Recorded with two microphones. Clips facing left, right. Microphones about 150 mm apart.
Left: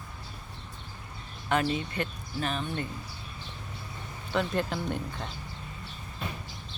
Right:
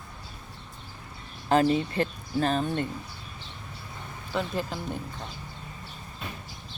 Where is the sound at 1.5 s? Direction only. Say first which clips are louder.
Right 6 dB; 30° right (ahead or behind).